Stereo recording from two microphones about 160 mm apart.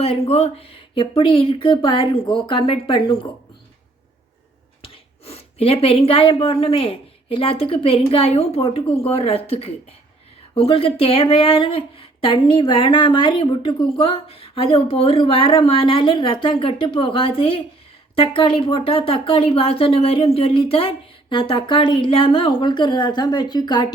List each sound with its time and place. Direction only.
0.0 s speech: 40° left (ahead or behind)
4.8 s speech: 40° left (ahead or behind)